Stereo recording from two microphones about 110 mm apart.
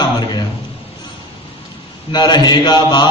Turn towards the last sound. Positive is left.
turn(degrees=40)  # may be behind; listen again after turning